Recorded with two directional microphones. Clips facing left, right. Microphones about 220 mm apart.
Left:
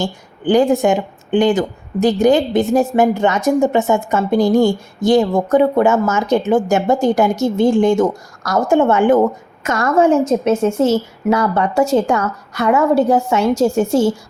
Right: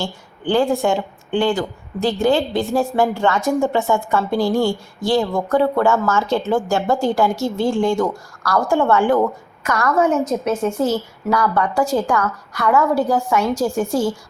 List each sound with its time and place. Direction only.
0.0 s a woman's voice: 15° left (ahead or behind)